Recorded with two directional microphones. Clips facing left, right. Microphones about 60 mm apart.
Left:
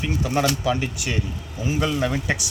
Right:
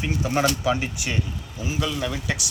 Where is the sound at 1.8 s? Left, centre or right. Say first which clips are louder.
Left 4 dB; left.